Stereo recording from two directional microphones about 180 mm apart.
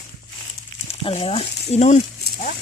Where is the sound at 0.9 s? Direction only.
30° left (ahead or behind).